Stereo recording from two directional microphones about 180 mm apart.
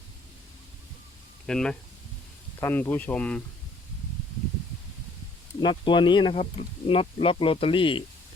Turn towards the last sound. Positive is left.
turn(degrees=30)  # may be behind; listen again after turning